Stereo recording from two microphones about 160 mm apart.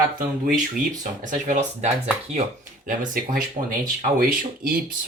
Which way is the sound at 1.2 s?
50° right (ahead or behind).